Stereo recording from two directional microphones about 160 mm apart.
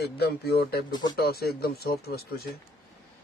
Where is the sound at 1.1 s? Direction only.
75° left (ahead or behind).